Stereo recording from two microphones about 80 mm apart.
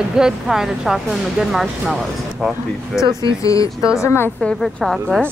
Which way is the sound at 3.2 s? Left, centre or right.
Left.